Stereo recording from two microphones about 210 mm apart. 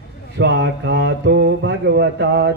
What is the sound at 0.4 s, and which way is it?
Speech, 55° right (ahead or behind).